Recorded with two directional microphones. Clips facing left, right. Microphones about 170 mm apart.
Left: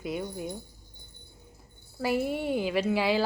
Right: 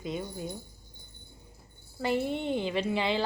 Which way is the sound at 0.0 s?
10° left (ahead or behind).